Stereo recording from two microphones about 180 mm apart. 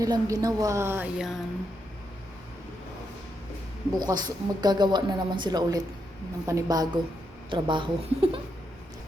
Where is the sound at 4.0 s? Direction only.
20° right (ahead or behind).